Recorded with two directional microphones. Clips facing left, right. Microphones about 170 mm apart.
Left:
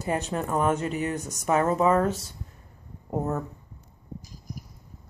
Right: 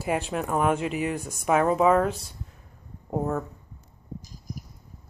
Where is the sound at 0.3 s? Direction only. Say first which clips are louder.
Even; 5° right (ahead or behind).